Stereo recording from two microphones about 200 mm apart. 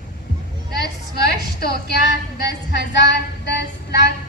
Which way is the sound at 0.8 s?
55° left (ahead or behind).